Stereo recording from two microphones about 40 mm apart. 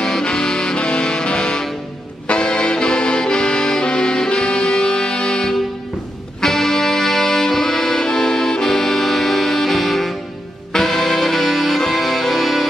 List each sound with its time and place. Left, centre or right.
0.0 s music: centre